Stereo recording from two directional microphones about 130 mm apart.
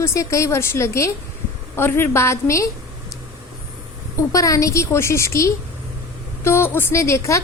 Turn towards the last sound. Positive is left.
turn(degrees=20)  # may be behind; listen again after turning